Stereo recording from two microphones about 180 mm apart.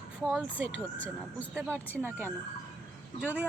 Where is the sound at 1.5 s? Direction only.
15° right (ahead or behind).